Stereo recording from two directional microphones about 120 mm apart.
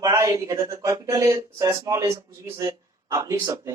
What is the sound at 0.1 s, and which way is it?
A man's voice, 30° right (ahead or behind).